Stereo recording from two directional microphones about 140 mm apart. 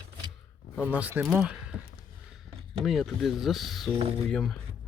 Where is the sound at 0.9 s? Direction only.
10° right (ahead or behind).